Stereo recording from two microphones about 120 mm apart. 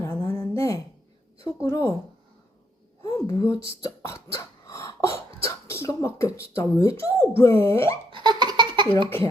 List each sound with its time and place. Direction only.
0.0 s a sound: 20° left (ahead or behind)
1.5 s speech: 25° left (ahead or behind)
3.0 s speech: 25° left (ahead or behind)
8.1 s laughter: 40° right (ahead or behind)
9.0 s speech: 20° left (ahead or behind)